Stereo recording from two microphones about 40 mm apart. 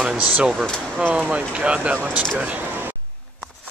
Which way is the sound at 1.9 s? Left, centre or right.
Right.